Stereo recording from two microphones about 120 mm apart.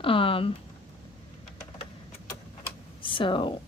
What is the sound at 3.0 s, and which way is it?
Speech, 45° left (ahead or behind).